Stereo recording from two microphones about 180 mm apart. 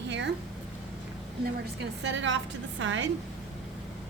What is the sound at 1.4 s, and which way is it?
A woman's voice, 80° right.